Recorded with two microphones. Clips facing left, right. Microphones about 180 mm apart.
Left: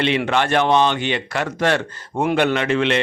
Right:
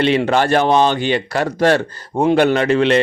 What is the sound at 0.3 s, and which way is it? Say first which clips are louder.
Speech: right 3 dB; 40° right (ahead or behind).